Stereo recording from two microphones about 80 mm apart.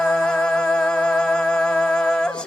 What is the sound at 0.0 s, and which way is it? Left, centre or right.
Music, centre.